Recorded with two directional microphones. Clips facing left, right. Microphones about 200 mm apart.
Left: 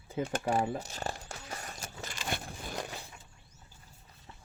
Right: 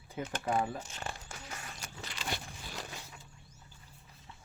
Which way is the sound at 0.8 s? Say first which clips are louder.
Left 4 dB; 40° left (ahead or behind).